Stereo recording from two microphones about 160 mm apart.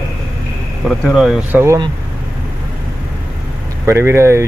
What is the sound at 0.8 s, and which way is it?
Speech, centre (ahead or behind).